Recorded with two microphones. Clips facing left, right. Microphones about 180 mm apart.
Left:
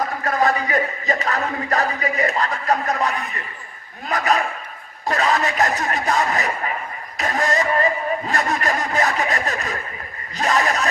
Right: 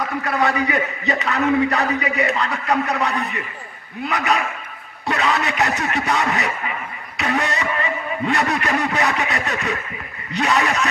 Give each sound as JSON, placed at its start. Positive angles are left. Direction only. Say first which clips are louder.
{"t": 0.2, "sound": "a man's voice", "louder": "even", "side_deg": 35}
{"t": 4.0, "sound": "a man's voice", "louder": "left 1 dB", "side_deg": 35}